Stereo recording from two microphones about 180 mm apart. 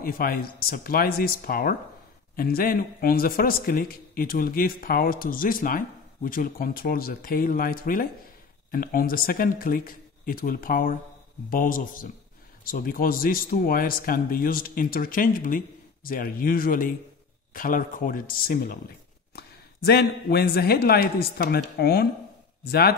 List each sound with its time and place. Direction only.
0.0 s a man's voice: 55° left (ahead or behind)